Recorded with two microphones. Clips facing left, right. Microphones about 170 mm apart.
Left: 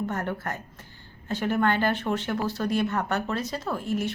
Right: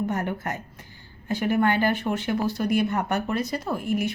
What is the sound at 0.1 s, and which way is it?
A woman's voice, 15° right (ahead or behind).